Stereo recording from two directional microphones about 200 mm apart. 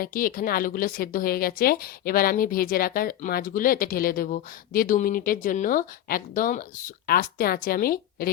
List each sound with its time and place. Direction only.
0.0 s a woman's voice: 45° left (ahead or behind)